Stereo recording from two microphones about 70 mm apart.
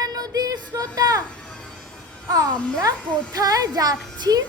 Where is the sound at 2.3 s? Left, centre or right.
Right.